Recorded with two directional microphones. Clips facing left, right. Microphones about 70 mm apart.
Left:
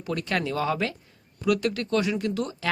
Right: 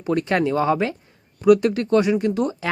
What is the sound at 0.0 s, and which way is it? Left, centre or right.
Speech, right.